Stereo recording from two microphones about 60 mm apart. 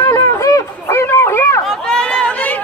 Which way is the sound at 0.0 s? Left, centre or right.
Left.